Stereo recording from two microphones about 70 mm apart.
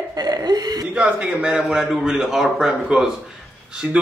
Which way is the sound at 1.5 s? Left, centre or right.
Centre.